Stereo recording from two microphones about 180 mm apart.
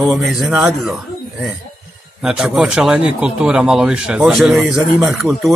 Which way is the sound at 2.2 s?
5° right (ahead or behind).